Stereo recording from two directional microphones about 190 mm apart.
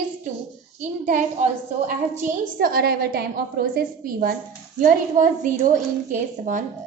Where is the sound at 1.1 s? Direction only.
40° right (ahead or behind).